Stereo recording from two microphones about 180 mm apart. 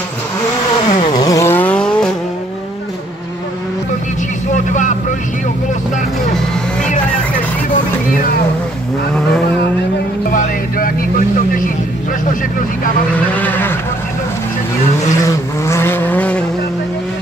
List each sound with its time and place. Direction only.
0.8 s vehicle: 40° left (ahead or behind)
1.2 s vehicle: 15° left (ahead or behind)
4.6 s vehicle: 45° left (ahead or behind)
10.3 s vehicle: 50° left (ahead or behind)
13.1 s a sound: 10° left (ahead or behind)
15.6 s vehicle: 15° left (ahead or behind)